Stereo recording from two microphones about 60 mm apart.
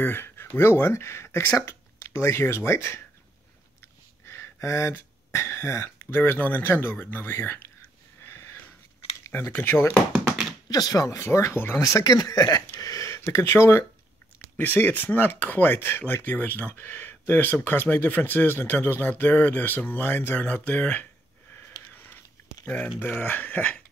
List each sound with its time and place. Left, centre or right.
0.0 s speech: left
3.8 s a sound: left
6.1 s speech: left
8.3 s sniff: left
9.5 s speech: left
10.7 s speech: left
11.1 s speech: left
11.8 s speech: left
12.8 s a sound: left
13.2 s speech: left
14.6 s speech: left
21.9 s a sound: left
22.9 s speech: left